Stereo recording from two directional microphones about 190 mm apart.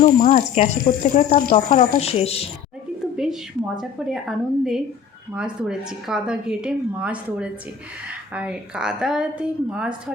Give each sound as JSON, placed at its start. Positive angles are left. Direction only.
{"t": 0.0, "sound": "speech", "side_deg": 40}
{"t": 3.8, "sound": "a woman's voice", "side_deg": 0}